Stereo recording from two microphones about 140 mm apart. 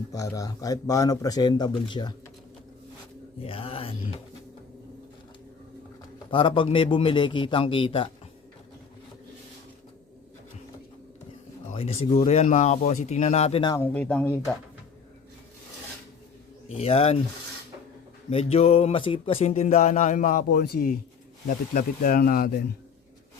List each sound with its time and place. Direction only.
0.1 s speech: 25° left (ahead or behind)
3.4 s a man's voice: 40° left (ahead or behind)
6.3 s a man's voice: 40° left (ahead or behind)
11.7 s speech: 45° left (ahead or behind)
13.6 s a man's voice: 30° left (ahead or behind)
13.8 s speech: 10° left (ahead or behind)
16.6 s speech: 45° left (ahead or behind)
18.3 s speech: 45° left (ahead or behind); by 22.5 s 90° left